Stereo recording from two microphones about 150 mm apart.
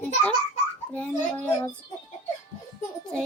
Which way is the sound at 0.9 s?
10° left (ahead or behind).